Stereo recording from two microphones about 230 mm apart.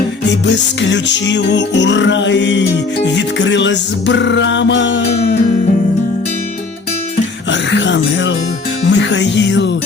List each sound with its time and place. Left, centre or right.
0.4 s music: left
7.5 s speech: left
8.9 s music: left